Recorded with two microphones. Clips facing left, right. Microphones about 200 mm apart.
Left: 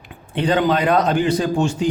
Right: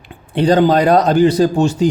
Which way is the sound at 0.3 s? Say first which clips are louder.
Right 6 dB; 35° right (ahead or behind).